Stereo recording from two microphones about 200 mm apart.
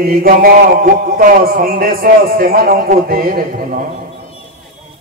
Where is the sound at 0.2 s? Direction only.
45° right (ahead or behind).